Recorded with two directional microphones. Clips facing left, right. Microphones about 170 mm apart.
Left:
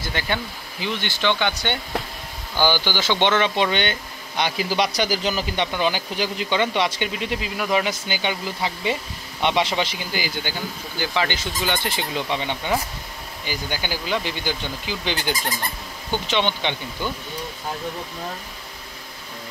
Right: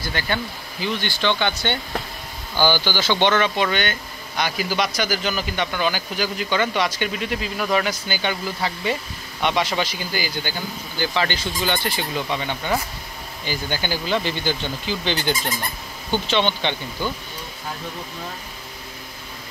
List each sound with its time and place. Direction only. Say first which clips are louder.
0.0 s speech: right 1 dB; 20° left (ahead or behind)